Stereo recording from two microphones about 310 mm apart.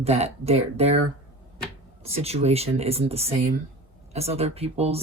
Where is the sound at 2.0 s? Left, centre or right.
Centre.